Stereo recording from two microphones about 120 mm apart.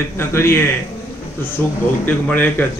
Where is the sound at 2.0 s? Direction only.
15° left (ahead or behind).